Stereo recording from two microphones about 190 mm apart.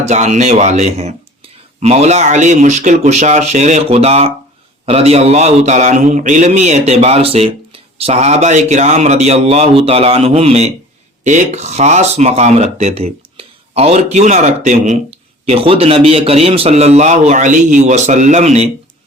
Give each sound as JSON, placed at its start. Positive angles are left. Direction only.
{"t": 0.0, "sound": "speech", "side_deg": -40}